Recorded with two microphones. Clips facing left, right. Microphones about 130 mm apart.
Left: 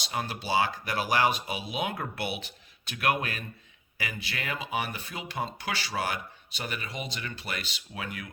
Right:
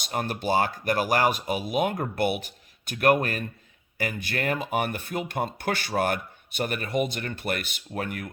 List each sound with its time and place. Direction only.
0.0 s speech: 50° right (ahead or behind)